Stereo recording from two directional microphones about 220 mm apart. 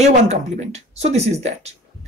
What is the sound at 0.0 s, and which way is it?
A woman's voice, 30° right (ahead or behind).